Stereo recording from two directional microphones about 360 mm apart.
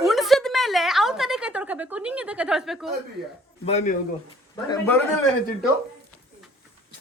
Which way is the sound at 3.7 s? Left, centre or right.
Centre.